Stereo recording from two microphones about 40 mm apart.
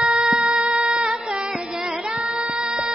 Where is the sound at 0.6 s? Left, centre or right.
Right.